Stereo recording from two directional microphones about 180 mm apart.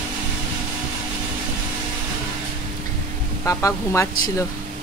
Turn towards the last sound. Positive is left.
turn(degrees=15)  # may be behind; listen again after turning